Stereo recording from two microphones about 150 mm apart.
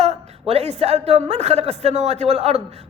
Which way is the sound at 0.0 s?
45° right (ahead or behind).